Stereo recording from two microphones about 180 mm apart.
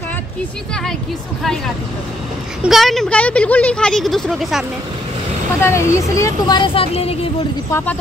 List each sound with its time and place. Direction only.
2.6 s speech: centre (ahead or behind)
5.6 s speech: 15° left (ahead or behind); by 7.2 s 35° left (ahead or behind)